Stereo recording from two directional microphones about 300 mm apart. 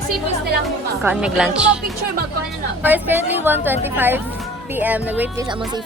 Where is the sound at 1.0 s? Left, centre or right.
Centre.